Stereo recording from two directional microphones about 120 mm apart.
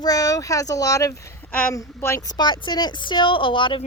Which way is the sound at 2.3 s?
40° left (ahead or behind).